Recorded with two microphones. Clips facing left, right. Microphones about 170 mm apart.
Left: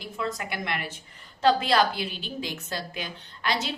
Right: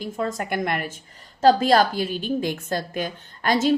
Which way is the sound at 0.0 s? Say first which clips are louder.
Right 5 dB; 45° right (ahead or behind).